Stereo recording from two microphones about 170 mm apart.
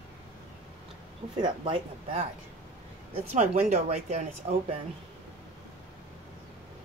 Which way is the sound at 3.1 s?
40° right (ahead or behind).